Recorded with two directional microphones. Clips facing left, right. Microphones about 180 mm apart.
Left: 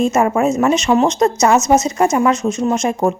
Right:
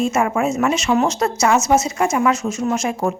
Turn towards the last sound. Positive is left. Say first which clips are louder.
# left 4 dB
turn(degrees=35)  # may be behind; listen again after turning